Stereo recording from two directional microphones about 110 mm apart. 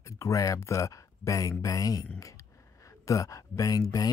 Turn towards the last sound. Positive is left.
turn(degrees=35)  # may be behind; listen again after turning